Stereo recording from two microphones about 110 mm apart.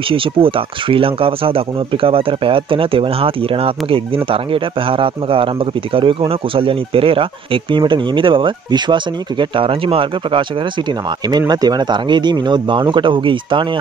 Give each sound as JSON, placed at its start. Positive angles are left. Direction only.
{"t": 0.1, "sound": "speech", "side_deg": -55}
{"t": 11.2, "sound": "speech", "side_deg": -40}